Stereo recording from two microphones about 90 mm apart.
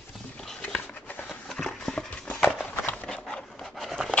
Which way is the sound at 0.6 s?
15° left (ahead or behind).